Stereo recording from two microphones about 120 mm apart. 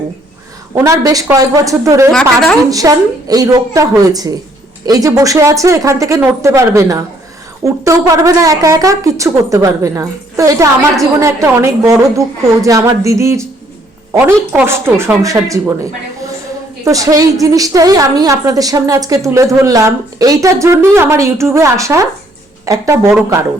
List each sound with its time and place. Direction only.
0.9 s a woman's voice: 30° right (ahead or behind)
2.1 s a woman's voice: 5° left (ahead or behind)
2.6 s a woman's voice: 30° right (ahead or behind)
14.5 s a woman's voice: 20° right (ahead or behind)
16.8 s a woman's voice: 30° right (ahead or behind)